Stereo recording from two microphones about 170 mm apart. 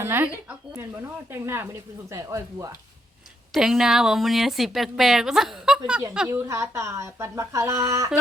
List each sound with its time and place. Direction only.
0.0 s speech: 15° right (ahead or behind)
3.5 s speech: 5° right (ahead or behind)
6.2 s speech: 15° right (ahead or behind)